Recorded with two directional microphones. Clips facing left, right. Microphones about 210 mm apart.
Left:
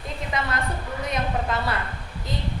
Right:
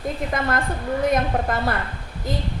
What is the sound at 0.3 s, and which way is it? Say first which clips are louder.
A woman's voice: right 2 dB; 50° right (ahead or behind).